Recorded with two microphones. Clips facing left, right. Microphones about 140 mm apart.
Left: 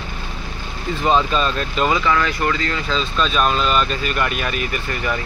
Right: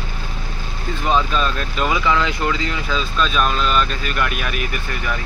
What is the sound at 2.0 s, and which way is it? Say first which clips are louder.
Speech: even; 15° right (ahead or behind).